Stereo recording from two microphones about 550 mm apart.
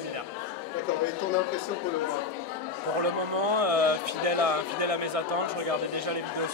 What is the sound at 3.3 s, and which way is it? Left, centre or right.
Speech, right.